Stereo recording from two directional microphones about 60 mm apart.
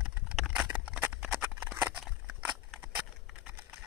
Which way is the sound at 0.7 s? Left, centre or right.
Right.